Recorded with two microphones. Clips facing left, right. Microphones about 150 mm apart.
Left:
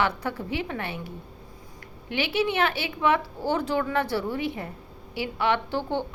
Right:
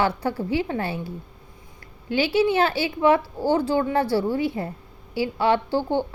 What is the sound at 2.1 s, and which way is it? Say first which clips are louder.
A woman's voice: right 6 dB; 30° right (ahead or behind).